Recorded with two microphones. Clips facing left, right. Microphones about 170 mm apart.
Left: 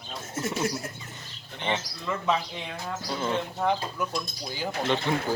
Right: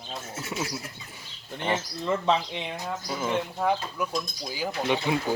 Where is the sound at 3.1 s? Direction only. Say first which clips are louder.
Even; 5° right (ahead or behind).